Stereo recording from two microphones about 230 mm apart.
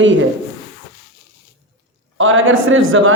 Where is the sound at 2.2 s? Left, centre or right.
Right.